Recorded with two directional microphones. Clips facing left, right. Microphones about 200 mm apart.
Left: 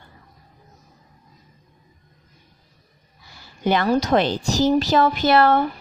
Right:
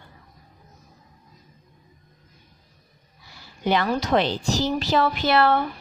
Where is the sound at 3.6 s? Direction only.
50° left (ahead or behind).